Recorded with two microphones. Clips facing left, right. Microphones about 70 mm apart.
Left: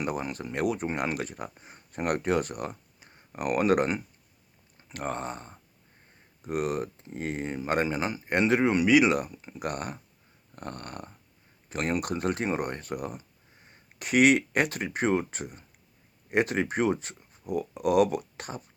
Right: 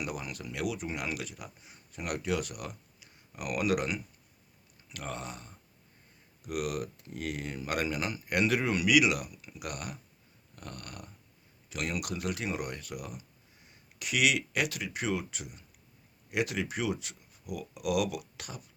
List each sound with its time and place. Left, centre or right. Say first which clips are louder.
0.0 s speech: left 6 dB; left